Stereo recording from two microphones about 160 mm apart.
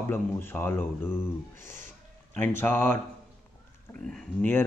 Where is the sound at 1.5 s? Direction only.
55° right (ahead or behind).